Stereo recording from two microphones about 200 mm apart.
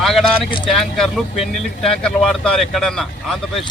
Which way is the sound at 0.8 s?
Centre (ahead or behind).